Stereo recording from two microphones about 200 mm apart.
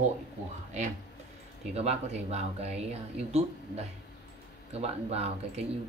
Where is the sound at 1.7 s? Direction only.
30° right (ahead or behind).